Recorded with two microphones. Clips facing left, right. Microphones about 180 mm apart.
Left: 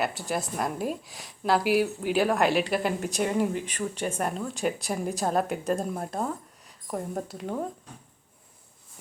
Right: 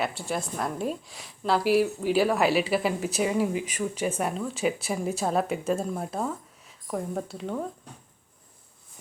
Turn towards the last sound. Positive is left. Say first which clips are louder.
# right 1 dB
turn(degrees=5)  # may be behind; listen again after turning